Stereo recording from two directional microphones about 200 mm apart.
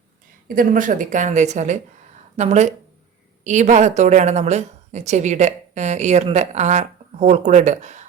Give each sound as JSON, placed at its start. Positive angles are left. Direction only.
{"t": 0.4, "sound": "a woman's voice", "side_deg": -45}